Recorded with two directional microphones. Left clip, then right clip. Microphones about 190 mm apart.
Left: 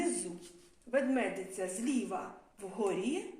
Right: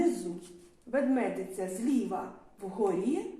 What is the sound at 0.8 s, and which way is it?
Speech, 40° left (ahead or behind).